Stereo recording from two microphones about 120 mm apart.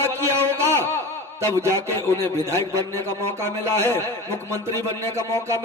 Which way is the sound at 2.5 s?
25° right (ahead or behind).